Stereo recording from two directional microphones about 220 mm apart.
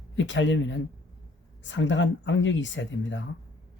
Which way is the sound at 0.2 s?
60° left (ahead or behind).